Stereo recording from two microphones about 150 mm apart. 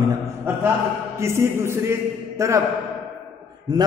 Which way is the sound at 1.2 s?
20° right (ahead or behind).